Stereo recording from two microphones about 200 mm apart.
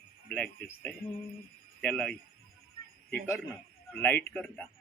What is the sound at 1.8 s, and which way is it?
Speech, 5° left (ahead or behind).